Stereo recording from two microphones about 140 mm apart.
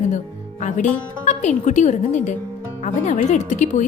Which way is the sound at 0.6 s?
65° left (ahead or behind).